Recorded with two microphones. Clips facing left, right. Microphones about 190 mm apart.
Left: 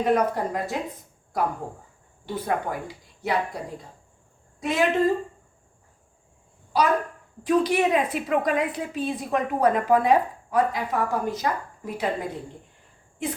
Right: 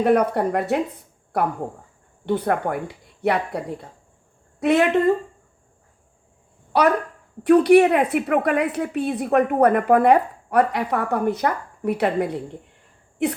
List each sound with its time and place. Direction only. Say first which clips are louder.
0.0 s a woman's voice: right 4 dB; 65° right (ahead or behind)
2.2 s a woman's voice: right 6 dB; 65° right (ahead or behind)
6.7 s a woman's voice: right 4 dB; 65° right (ahead or behind)